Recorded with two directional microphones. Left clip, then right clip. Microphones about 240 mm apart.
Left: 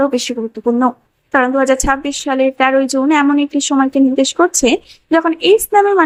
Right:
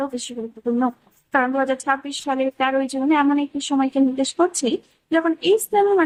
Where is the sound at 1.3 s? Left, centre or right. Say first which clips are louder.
Left 7 dB; centre.